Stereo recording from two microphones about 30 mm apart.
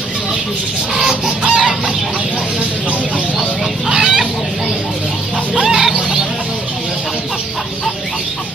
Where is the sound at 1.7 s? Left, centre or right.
Right.